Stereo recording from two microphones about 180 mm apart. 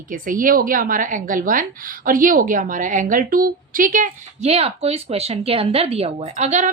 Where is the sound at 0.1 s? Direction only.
50° right (ahead or behind).